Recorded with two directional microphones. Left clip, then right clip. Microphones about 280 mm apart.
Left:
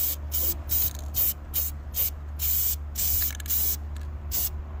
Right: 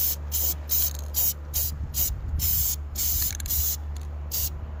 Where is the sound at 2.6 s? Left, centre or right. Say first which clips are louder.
Right 3 dB; centre.